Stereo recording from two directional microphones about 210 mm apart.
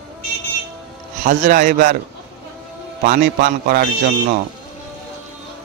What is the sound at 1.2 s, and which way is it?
Speech, 40° right (ahead or behind).